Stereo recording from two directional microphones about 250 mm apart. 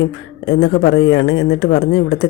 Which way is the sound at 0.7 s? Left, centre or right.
Left.